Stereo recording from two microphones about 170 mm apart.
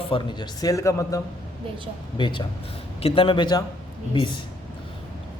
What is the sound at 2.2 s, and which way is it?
A man's voice, 30° left (ahead or behind).